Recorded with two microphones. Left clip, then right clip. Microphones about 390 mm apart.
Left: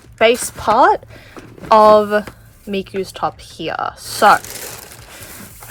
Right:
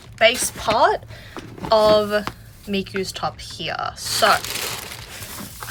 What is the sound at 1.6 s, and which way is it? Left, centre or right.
Speech, centre.